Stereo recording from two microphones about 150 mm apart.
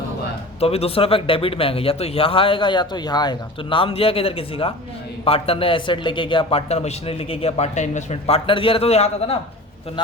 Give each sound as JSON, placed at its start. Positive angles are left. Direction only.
{"t": 0.6, "sound": "a man's voice", "side_deg": 40}